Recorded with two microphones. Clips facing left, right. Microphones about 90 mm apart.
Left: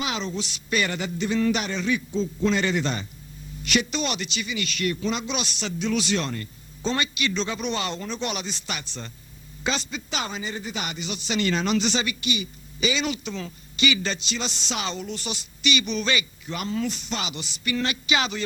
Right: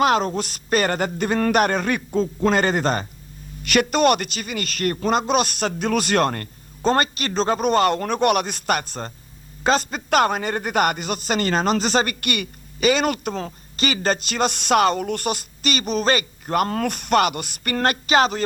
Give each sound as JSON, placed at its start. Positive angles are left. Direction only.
{"t": 0.0, "sound": "speech", "side_deg": -50}